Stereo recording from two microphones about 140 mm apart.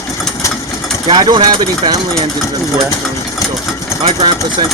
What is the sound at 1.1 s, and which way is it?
Speech, 35° right (ahead or behind).